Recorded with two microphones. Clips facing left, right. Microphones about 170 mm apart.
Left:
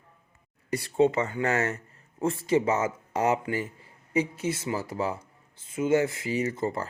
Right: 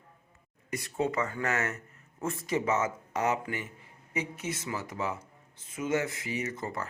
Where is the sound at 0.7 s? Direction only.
30° left (ahead or behind).